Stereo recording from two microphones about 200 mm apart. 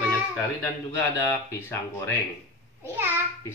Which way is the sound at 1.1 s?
15° left (ahead or behind).